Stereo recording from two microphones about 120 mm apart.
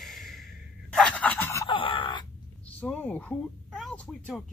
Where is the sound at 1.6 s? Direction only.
45° left (ahead or behind).